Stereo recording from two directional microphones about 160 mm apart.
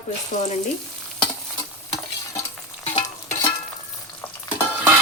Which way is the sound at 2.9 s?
20° left (ahead or behind).